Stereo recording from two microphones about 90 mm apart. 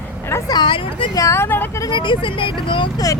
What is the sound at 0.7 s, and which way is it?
Speech, 75° left (ahead or behind).